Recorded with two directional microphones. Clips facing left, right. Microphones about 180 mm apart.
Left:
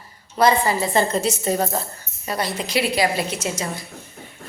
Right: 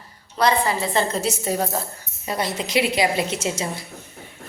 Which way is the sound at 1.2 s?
5° right (ahead or behind).